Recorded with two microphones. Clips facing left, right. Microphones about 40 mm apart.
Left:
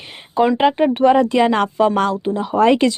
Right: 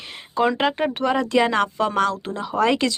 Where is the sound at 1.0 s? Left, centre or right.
Left.